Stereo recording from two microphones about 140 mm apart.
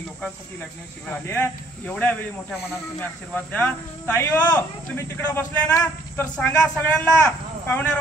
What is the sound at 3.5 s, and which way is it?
Speech, 15° left (ahead or behind).